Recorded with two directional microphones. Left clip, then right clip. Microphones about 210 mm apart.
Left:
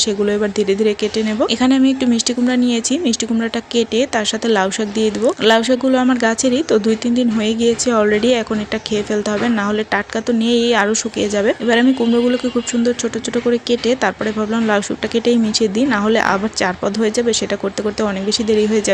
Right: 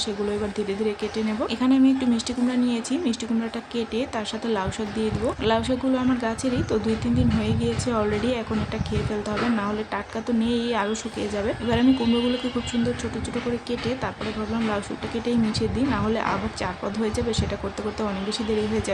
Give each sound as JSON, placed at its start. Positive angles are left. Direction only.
{"t": 0.0, "sound": "speech", "side_deg": 25}
{"t": 9.6, "sound": "speech", "side_deg": 25}
{"t": 13.7, "sound": "speech", "side_deg": 30}